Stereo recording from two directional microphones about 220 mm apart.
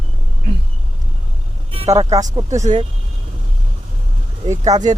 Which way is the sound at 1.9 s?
15° right (ahead or behind).